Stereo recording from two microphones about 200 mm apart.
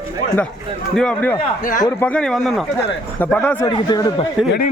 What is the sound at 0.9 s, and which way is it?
Speech, 5° left (ahead or behind).